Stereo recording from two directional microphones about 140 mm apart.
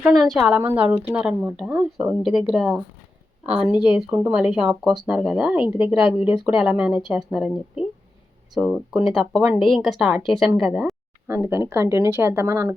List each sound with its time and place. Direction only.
0.0 s speech: centre (ahead or behind)
0.6 s speech: 15° right (ahead or behind); by 10.9 s centre (ahead or behind)
11.3 s speech: 15° right (ahead or behind)